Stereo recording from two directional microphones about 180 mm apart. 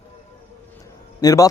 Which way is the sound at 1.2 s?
20° left (ahead or behind).